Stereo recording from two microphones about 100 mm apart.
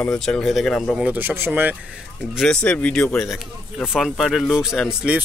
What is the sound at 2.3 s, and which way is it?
Speech, 5° left (ahead or behind).